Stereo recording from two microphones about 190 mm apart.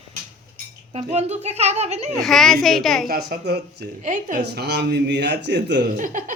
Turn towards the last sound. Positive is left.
turn(degrees=-45)  # may be behind; listen again after turning